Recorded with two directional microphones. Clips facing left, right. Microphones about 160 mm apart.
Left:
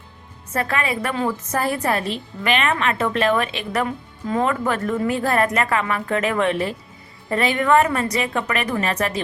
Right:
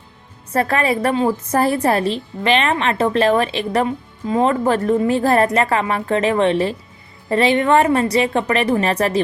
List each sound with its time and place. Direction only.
0.5 s a woman's voice: 35° right (ahead or behind)